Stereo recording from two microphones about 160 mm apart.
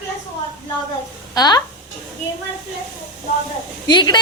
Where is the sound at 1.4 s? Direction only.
25° left (ahead or behind).